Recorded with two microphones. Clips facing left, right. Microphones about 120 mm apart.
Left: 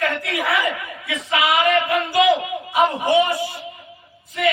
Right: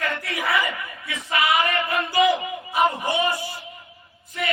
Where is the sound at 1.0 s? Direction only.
90° left.